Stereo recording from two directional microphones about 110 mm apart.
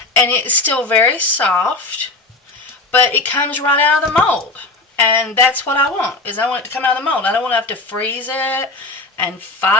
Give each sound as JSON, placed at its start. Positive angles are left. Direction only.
{"t": 0.2, "sound": "speech", "side_deg": 20}
{"t": 2.9, "sound": "speech", "side_deg": 15}